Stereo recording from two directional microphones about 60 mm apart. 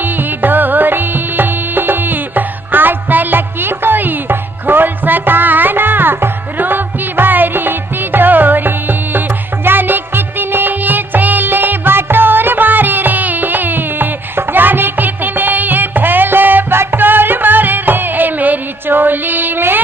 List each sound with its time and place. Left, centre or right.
0.4 s music: right